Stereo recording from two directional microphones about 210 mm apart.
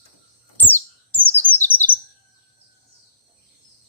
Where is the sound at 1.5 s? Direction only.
10° left (ahead or behind).